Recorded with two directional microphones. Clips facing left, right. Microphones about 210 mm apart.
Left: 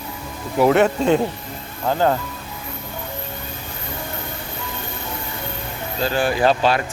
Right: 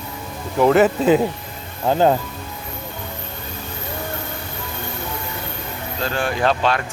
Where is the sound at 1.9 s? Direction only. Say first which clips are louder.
Right 3 dB; 20° right (ahead or behind).